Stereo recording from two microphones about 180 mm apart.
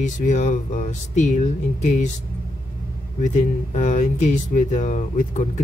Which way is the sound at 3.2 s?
40° left (ahead or behind).